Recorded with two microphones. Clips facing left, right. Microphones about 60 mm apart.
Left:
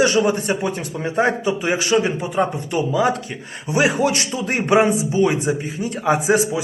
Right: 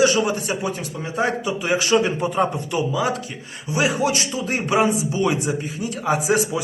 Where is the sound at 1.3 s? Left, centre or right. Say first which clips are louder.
Left 2 dB; left.